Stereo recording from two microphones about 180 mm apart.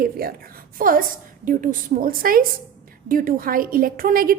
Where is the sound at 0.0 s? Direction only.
55° right (ahead or behind).